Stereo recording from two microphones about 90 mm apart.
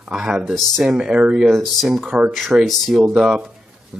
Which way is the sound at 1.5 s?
Centre (ahead or behind).